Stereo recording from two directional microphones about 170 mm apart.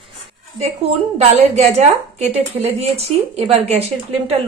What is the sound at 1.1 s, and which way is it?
A woman's voice, 40° right (ahead or behind).